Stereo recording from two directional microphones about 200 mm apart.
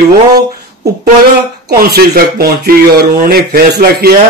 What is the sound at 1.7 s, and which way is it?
Speech, 50° right (ahead or behind).